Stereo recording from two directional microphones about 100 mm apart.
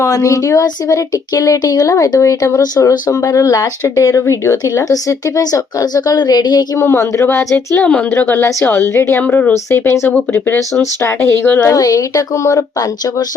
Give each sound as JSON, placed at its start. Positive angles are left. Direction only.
{"t": 0.0, "sound": "speech", "side_deg": 30}
{"t": 6.8, "sound": "speech", "side_deg": 30}
{"t": 7.8, "sound": "a woman's voice", "side_deg": 15}
{"t": 11.7, "sound": "speech", "side_deg": 35}